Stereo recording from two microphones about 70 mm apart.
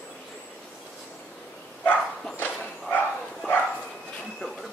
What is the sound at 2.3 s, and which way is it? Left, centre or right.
Bow-wow, left.